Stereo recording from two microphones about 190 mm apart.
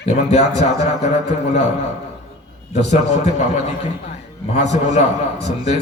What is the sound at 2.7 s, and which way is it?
Speech, 35° left (ahead or behind).